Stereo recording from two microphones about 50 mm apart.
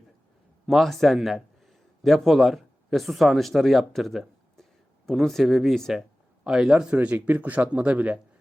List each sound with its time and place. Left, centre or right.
0.7 s a man's voice: centre
6.4 s a man's voice: centre
7.0 s speech: right